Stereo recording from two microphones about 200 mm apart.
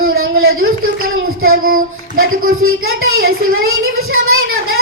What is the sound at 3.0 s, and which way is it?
Child singing, 90° right.